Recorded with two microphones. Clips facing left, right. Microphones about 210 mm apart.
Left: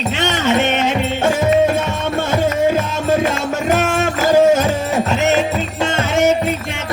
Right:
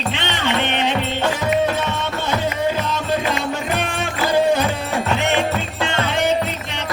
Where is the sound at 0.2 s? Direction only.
45° left (ahead or behind).